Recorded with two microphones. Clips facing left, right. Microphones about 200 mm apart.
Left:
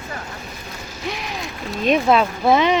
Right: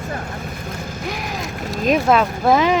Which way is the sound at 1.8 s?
5° right (ahead or behind).